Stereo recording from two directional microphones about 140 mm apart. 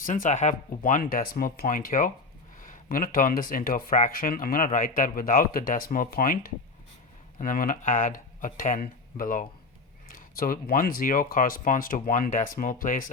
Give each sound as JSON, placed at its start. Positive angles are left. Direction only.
{"t": 0.0, "sound": "speech", "side_deg": 70}
{"t": 7.3, "sound": "speech", "side_deg": 80}
{"t": 10.2, "sound": "speech", "side_deg": 90}